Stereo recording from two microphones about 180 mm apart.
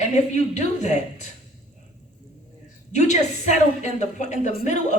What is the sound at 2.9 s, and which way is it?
A woman's voice, 40° left (ahead or behind).